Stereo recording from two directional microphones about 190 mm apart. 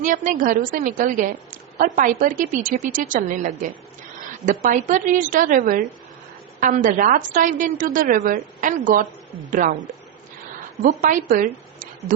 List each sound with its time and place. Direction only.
0.0 s a woman's voice: 45° right (ahead or behind)
10.8 s a woman's voice: 45° right (ahead or behind)
11.3 s a sound: 45° right (ahead or behind)